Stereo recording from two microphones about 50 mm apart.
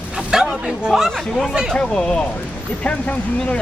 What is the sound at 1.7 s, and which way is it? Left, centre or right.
Speech, centre.